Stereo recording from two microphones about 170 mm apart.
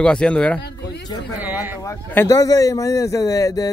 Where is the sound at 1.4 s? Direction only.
10° right (ahead or behind).